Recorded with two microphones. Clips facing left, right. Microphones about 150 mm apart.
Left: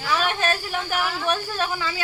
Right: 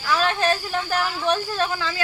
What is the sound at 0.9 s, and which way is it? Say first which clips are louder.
Speech: right 2 dB; 10° left (ahead or behind).